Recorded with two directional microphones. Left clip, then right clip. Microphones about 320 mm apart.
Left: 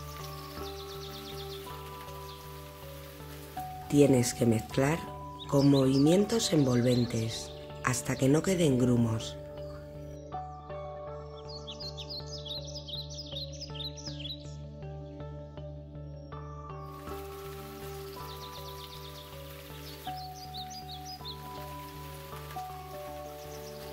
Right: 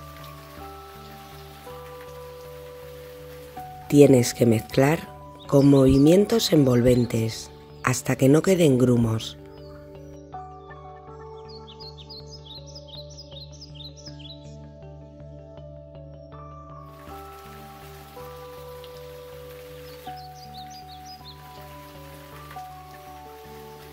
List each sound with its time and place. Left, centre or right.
3.9 s speech: right